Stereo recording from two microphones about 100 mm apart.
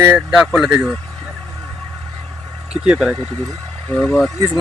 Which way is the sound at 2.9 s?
10° right (ahead or behind).